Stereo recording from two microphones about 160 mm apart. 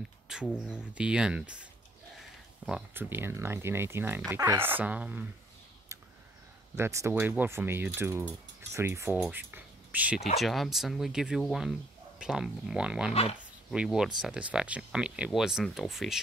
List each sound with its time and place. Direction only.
0.3 s speech: 5° right (ahead or behind)
6.8 s speech: 15° right (ahead or behind)
13.1 s speech: 40° left (ahead or behind)
13.7 s speech: 5° right (ahead or behind)